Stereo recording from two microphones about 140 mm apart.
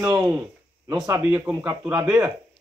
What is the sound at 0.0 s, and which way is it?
A man's voice, 25° right (ahead or behind).